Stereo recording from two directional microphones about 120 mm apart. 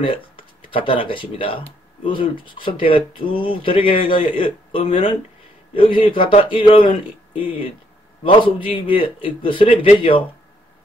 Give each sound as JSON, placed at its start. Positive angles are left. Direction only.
{"t": 0.0, "sound": "a man's voice", "side_deg": 45}
{"t": 8.2, "sound": "a man's voice", "side_deg": 45}